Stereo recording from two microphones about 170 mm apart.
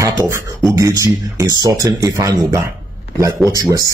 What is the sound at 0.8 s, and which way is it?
Speech, 20° right (ahead or behind).